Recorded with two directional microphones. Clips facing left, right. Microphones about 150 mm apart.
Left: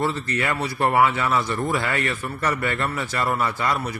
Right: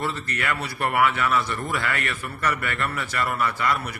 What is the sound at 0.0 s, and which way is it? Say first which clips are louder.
A man's voice: left 4 dB; 30° left (ahead or behind).